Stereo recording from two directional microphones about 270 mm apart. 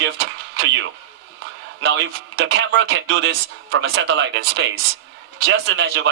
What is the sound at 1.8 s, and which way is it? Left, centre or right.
Speech, right.